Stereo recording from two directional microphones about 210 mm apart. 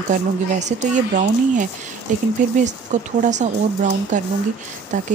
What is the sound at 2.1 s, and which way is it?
Speech, 35° right (ahead or behind).